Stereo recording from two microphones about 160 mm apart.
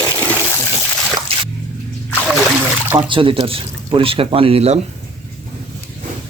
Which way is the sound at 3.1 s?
30° right (ahead or behind).